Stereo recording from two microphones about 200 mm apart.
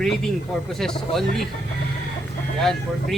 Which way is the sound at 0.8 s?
Centre (ahead or behind).